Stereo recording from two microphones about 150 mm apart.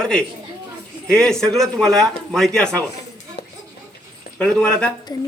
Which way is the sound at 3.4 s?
90° left.